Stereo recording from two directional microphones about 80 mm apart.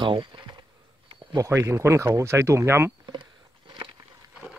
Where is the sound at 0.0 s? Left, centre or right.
Right.